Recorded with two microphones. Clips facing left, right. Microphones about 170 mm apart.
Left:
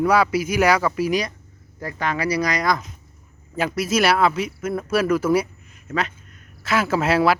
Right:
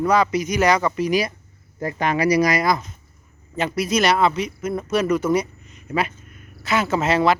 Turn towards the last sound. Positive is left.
turn(degrees=5)  # may be behind; listen again after turning